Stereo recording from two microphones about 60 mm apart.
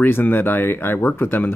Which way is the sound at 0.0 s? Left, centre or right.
Left.